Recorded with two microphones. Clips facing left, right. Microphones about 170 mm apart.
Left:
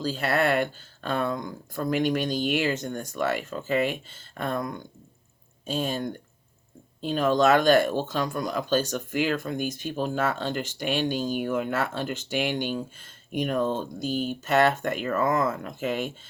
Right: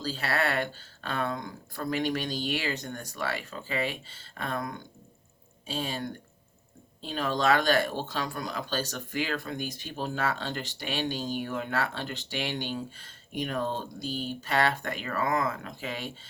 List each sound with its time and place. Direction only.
0.0 s speech: 45° left (ahead or behind)
5.6 s speech: 45° left (ahead or behind)
7.0 s speech: 45° left (ahead or behind)